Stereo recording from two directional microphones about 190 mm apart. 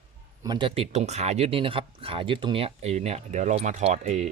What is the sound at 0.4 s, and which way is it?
Speech, 25° right (ahead or behind).